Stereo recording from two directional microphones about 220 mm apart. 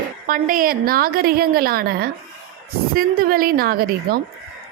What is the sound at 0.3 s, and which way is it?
A woman's voice, 40° right (ahead or behind).